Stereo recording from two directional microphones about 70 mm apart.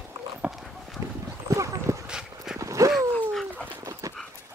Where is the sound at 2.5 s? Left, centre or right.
Right.